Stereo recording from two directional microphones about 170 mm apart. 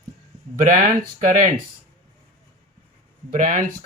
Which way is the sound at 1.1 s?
50° right (ahead or behind).